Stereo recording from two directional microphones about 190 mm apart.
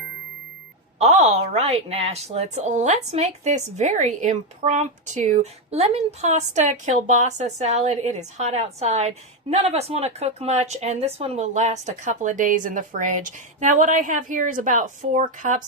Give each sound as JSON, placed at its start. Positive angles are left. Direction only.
{"t": 0.9, "sound": "a woman's voice", "side_deg": -35}